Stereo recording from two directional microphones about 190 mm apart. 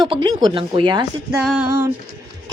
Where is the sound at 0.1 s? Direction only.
25° right (ahead or behind).